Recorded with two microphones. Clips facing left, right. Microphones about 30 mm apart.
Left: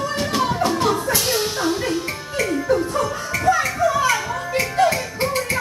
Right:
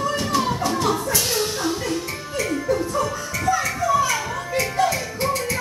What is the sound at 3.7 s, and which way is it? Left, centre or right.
Children playing, left.